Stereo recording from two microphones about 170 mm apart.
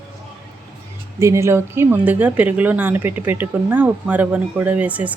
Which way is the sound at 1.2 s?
15° right (ahead or behind).